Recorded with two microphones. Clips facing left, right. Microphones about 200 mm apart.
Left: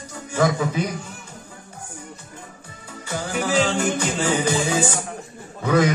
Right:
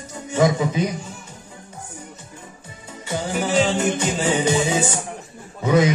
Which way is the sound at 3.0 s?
25° right (ahead or behind).